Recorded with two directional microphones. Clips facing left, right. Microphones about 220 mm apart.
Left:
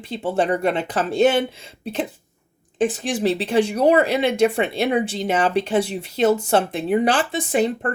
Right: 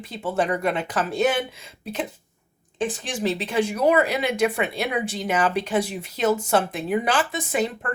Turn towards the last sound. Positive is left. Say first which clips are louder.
# left 5 dB
turn(degrees=30)  # may be behind; listen again after turning